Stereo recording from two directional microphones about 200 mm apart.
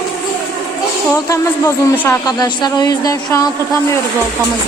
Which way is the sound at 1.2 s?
15° left (ahead or behind).